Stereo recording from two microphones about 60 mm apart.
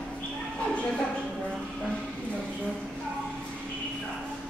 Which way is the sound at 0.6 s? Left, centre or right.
Centre.